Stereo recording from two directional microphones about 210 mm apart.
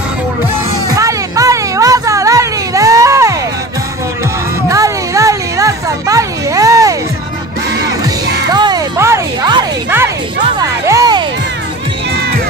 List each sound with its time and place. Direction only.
0.9 s music: 15° right (ahead or behind)
4.6 s a sound: 15° right (ahead or behind)
8.5 s music: 20° right (ahead or behind)